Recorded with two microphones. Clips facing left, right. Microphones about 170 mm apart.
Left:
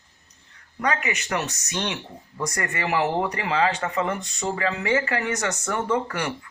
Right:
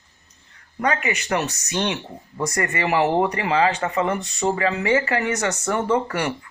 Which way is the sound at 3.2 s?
40° right (ahead or behind).